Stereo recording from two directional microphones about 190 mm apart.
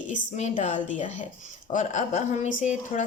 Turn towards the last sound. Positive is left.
turn(degrees=40)  # may be behind; listen again after turning